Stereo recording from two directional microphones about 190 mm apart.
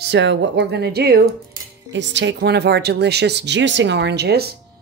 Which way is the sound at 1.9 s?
70° right (ahead or behind).